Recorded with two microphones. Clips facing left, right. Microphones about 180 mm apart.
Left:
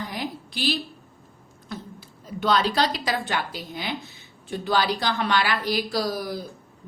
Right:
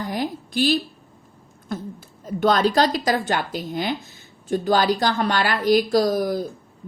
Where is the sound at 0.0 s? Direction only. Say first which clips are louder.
Right 5 dB; 45° right (ahead or behind).